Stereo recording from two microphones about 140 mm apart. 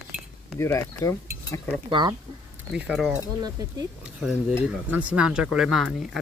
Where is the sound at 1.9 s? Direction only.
35° right (ahead or behind).